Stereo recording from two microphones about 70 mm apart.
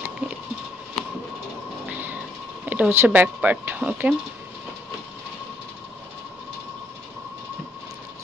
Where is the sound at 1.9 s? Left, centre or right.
Right.